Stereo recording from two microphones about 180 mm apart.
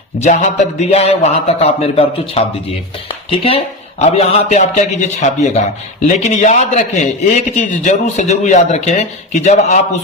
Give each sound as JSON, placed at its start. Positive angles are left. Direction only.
{"t": 0.2, "sound": "a man's voice", "side_deg": 40}